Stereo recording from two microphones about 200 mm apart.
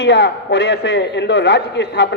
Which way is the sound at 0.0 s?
60° left (ahead or behind).